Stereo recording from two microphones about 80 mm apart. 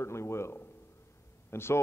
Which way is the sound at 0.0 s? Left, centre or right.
Left.